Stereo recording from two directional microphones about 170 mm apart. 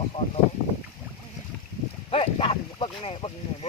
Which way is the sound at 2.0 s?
35° left (ahead or behind).